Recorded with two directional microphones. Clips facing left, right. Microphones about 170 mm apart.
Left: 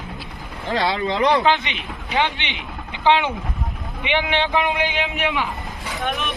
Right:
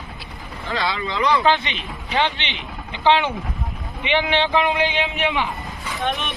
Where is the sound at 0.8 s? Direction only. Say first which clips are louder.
Left 3 dB; 60° left (ahead or behind).